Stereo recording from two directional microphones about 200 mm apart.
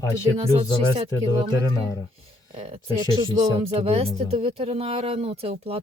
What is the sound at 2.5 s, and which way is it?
Speech, 30° right (ahead or behind).